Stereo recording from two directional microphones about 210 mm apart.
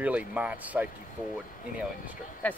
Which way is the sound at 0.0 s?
5° right (ahead or behind).